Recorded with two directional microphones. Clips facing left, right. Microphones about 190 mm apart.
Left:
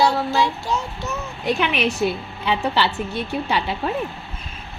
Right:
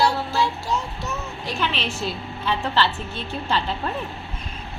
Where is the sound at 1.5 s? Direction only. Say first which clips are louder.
Left 7 dB; 15° left (ahead or behind).